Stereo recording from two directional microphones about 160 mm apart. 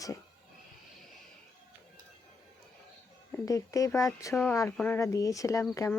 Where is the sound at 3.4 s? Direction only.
20° left (ahead or behind).